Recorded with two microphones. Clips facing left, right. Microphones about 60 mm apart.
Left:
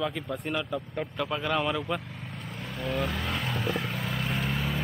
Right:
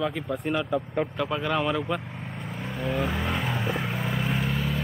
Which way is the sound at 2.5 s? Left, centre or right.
Centre.